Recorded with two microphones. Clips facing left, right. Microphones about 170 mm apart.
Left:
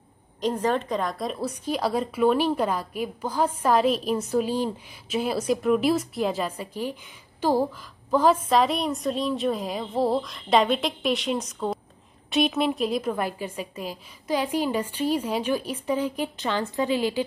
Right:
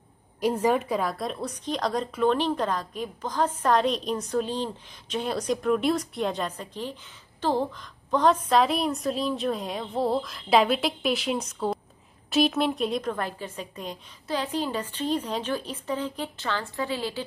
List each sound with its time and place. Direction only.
0.4 s a woman's voice: 10° right (ahead or behind); by 17.2 s 15° left (ahead or behind)